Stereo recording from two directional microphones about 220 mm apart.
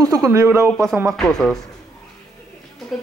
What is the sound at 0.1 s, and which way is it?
Speech, 15° right (ahead or behind).